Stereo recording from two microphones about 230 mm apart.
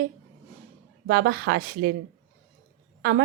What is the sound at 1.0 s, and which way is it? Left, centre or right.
Speech, right.